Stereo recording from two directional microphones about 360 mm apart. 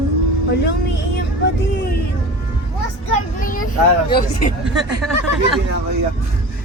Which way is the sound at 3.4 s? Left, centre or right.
Left.